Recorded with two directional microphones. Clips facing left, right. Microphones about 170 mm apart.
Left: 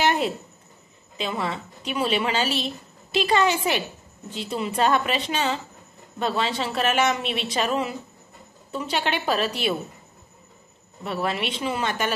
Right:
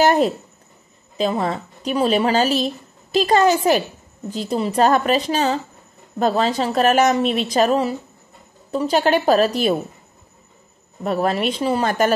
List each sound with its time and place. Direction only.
0.0 s a sound: 40° right (ahead or behind)
1.1 s a woman's voice: 40° right (ahead or behind)
11.1 s a woman's voice: 40° right (ahead or behind)